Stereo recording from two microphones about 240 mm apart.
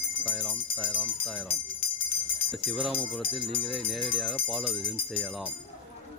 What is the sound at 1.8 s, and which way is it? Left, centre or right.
Jingle bell, left.